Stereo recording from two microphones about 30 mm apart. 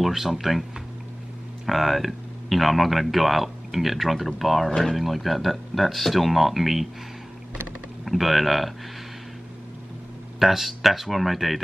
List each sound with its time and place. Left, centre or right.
0.0 s speech: centre
1.7 s speech: centre
4.6 s speech: centre
4.9 s speech: centre
8.0 s speech: centre
10.4 s speech: centre